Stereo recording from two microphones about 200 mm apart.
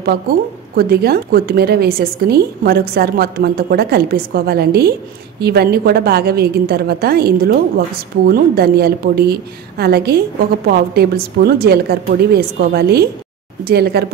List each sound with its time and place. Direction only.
0.7 s a woman's voice: 50° right (ahead or behind)